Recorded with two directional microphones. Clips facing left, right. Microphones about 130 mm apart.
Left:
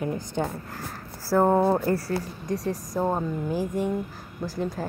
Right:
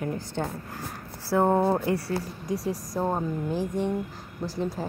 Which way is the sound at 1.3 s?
5° left (ahead or behind).